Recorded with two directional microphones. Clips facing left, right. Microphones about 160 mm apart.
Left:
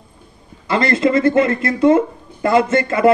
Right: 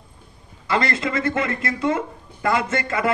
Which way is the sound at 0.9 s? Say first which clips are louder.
Left 10 dB; 30° left (ahead or behind).